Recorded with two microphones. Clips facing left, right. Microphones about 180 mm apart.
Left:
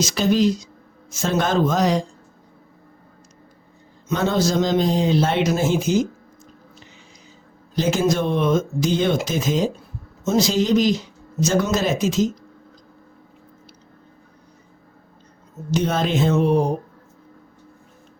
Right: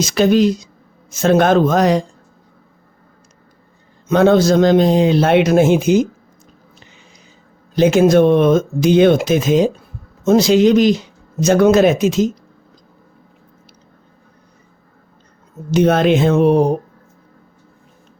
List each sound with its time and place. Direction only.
0.0 s speech: 60° right (ahead or behind)
4.1 s speech: 60° right (ahead or behind)
7.8 s speech: 60° right (ahead or behind)
15.7 s speech: 60° right (ahead or behind)